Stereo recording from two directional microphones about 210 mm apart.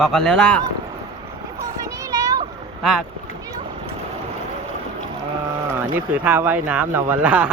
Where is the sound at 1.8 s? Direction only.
15° right (ahead or behind).